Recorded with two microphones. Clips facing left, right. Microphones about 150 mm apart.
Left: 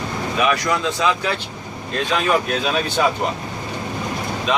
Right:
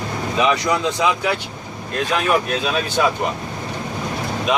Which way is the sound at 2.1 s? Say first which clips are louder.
Even; 5° right (ahead or behind).